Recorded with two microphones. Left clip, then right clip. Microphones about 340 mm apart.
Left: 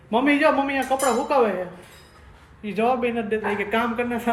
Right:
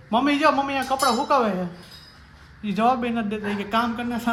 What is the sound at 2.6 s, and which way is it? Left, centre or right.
A man's voice, centre.